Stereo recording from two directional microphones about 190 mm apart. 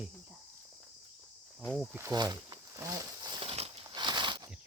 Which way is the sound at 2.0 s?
20° right (ahead or behind).